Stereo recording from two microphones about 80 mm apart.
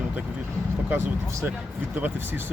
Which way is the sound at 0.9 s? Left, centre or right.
Right.